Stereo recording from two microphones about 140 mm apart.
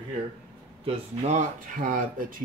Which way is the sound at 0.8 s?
55° right (ahead or behind).